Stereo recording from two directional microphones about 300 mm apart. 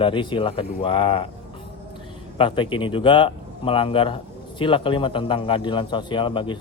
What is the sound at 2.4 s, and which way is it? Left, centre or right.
A man's voice, centre.